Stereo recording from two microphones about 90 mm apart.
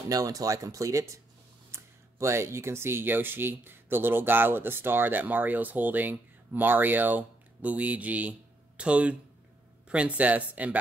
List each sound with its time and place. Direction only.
0.1 s speech: 40° right (ahead or behind); by 10.8 s 15° right (ahead or behind)